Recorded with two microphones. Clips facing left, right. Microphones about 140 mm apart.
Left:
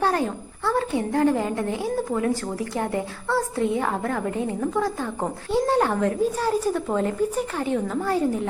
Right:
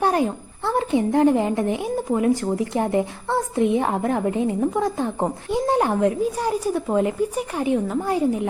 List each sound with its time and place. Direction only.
0.0 s a woman's voice: 15° right (ahead or behind)